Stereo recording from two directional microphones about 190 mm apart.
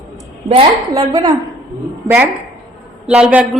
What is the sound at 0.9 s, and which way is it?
A woman's voice, 15° right (ahead or behind).